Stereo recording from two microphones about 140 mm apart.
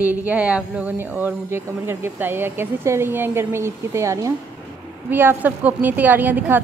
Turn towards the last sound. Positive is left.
turn(degrees=-15)  # may be behind; listen again after turning